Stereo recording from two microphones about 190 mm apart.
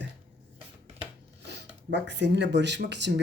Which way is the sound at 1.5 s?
65° right (ahead or behind).